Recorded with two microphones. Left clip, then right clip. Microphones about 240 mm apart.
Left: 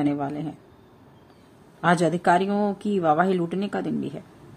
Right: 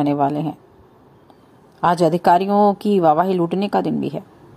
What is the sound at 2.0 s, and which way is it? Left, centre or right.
A woman's voice, centre.